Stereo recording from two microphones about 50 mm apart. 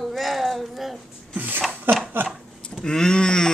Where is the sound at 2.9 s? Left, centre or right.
Centre.